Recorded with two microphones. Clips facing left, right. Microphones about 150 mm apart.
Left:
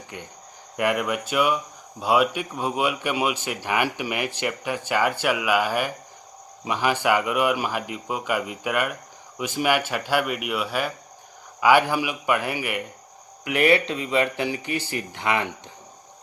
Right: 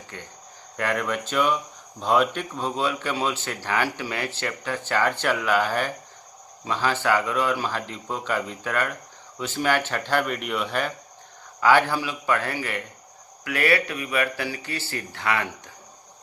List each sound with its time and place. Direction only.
0.1 s speech: 15° left (ahead or behind)